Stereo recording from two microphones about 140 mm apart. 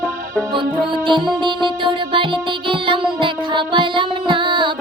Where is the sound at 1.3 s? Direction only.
35° right (ahead or behind).